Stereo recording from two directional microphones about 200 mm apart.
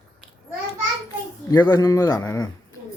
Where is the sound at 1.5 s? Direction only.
15° left (ahead or behind).